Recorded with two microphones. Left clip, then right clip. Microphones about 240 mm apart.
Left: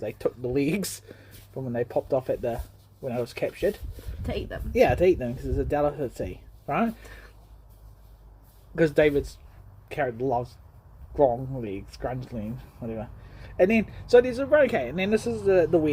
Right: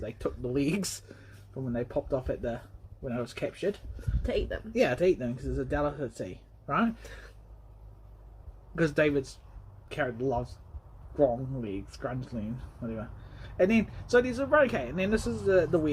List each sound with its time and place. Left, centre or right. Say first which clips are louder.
0.0 s a man's voice: left 6 dB; left
4.2 s speech: right 2 dB; centre
4.7 s a man's voice: left 6 dB; left
8.7 s a man's voice: left 5 dB; left